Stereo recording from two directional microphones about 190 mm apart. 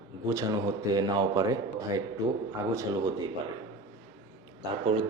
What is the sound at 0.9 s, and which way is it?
Speech, 20° right (ahead or behind).